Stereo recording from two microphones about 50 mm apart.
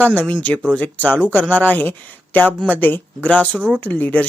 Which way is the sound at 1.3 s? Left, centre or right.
Left.